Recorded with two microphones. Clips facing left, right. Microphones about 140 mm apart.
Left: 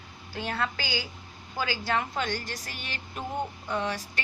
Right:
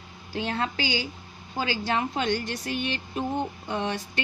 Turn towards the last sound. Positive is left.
turn(degrees=-20)  # may be behind; listen again after turning